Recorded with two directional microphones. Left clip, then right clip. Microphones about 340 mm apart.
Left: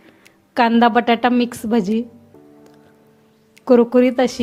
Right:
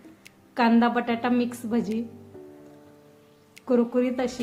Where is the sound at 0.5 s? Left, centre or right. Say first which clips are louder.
Left 8 dB; left.